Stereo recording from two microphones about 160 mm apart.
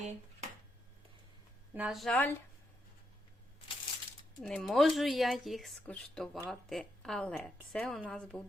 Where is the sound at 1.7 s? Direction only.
5° right (ahead or behind).